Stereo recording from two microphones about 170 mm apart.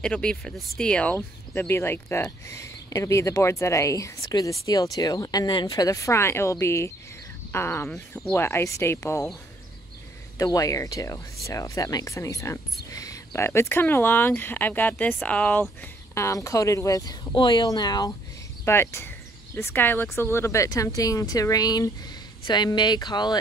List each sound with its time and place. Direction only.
0.0 s speech: 5° left (ahead or behind)
10.3 s speech: 20° left (ahead or behind)